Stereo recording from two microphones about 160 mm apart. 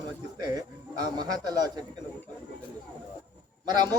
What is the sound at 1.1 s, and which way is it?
Speech, 25° right (ahead or behind).